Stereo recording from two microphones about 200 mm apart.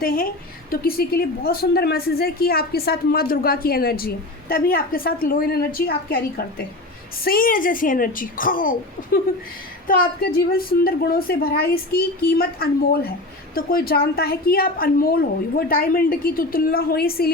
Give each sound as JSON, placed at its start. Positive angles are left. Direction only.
{"t": 0.0, "sound": "a woman's voice", "side_deg": 45}
{"t": 9.8, "sound": "a woman's voice", "side_deg": 45}